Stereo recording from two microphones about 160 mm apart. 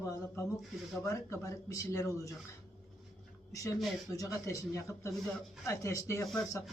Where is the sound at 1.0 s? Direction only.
20° left (ahead or behind).